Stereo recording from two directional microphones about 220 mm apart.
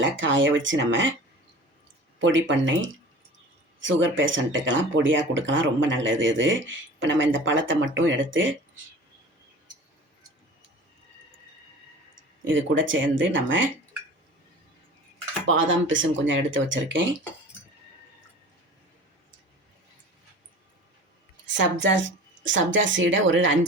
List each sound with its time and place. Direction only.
0.0 s speech: 60° right (ahead or behind)
2.1 s speech: 60° right (ahead or behind)
12.5 s speech: 60° right (ahead or behind)
15.4 s speech: 60° right (ahead or behind)
21.4 s speech: 55° right (ahead or behind)